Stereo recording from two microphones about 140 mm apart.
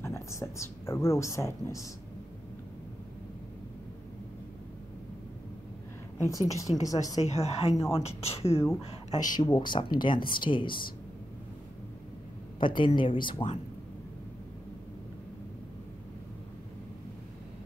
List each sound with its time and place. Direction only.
0.0 s speech: 20° left (ahead or behind)
6.1 s a woman's voice: 20° left (ahead or behind)
7.2 s speech: 50° left (ahead or behind)
8.5 s a woman's voice: 20° left (ahead or behind)
9.3 s speech: 30° left (ahead or behind)
12.5 s speech: 35° left (ahead or behind)